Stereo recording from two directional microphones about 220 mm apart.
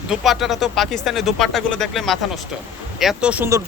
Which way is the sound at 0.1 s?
Centre (ahead or behind).